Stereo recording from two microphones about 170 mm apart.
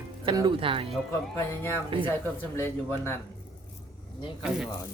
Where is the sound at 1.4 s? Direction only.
15° left (ahead or behind).